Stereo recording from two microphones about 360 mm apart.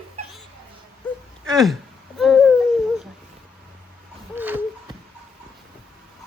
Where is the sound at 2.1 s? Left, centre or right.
Centre.